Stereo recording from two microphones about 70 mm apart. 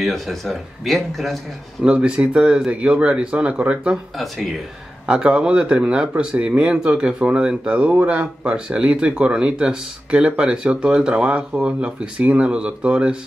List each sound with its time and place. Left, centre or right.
0.0 s speech: centre
1.8 s speech: centre
5.0 s speech: centre